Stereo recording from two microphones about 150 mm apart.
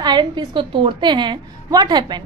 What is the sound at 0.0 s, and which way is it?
A woman's voice, 30° right (ahead or behind).